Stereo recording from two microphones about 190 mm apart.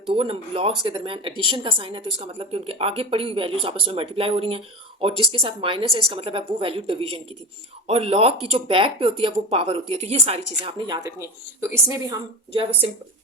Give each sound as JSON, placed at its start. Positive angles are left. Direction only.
{"t": 0.1, "sound": "a woman's voice", "side_deg": -30}